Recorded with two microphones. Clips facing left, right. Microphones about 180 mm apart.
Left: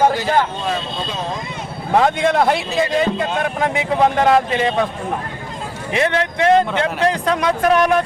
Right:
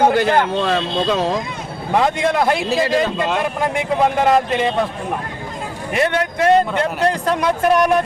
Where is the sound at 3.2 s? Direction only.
70° right (ahead or behind).